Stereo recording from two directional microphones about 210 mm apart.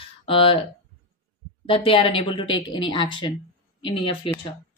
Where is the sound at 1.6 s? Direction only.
25° left (ahead or behind).